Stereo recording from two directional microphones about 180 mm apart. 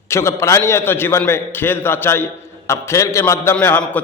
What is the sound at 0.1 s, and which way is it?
A man's voice, 15° left (ahead or behind).